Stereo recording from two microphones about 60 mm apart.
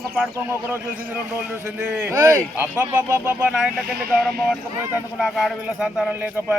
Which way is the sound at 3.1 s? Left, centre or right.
Centre.